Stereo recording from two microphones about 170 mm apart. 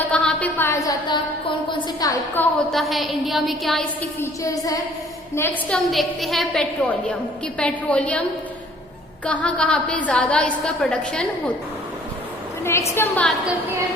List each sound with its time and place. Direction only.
0.1 s a sound: 5° left (ahead or behind); by 1.5 s 25° left (ahead or behind)
2.0 s a woman's voice: 15° left (ahead or behind)
2.7 s a woman's voice: centre (ahead or behind)
4.2 s a sound: 20° left (ahead or behind)
5.3 s a woman's voice: 10° left (ahead or behind)
9.2 s a woman's voice: 10° left (ahead or behind)
12.9 s a woman's voice: 15° left (ahead or behind)